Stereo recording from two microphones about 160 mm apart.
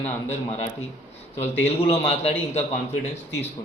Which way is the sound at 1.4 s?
40° left (ahead or behind).